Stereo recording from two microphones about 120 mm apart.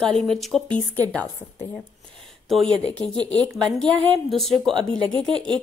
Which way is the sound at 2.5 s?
5° left (ahead or behind).